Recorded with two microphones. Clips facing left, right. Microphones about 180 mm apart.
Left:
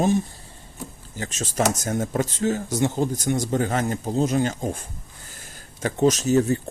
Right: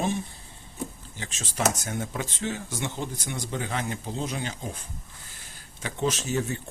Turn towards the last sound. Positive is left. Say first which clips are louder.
# left 9 dB
turn(degrees=40)  # may be behind; listen again after turning